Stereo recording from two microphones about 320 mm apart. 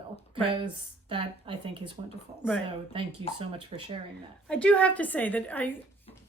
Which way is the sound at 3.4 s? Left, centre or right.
Centre.